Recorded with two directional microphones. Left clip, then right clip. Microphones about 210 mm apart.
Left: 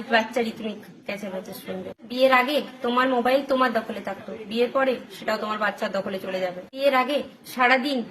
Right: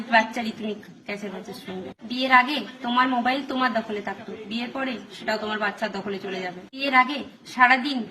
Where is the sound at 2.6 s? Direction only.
15° left (ahead or behind).